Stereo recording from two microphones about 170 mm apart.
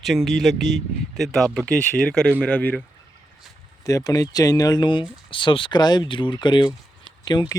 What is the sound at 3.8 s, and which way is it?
Speech, 20° left (ahead or behind).